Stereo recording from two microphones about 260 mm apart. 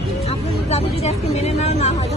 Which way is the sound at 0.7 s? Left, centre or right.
Left.